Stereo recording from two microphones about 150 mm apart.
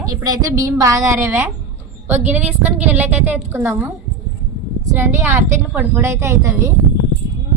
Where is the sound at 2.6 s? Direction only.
10° right (ahead or behind).